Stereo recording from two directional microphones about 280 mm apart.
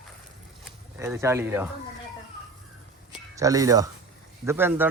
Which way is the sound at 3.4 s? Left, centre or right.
Centre.